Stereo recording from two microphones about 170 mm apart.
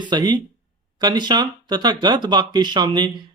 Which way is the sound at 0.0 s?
25° right (ahead or behind).